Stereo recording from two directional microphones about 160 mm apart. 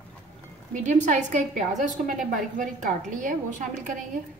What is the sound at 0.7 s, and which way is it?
A woman's voice, 50° right (ahead or behind).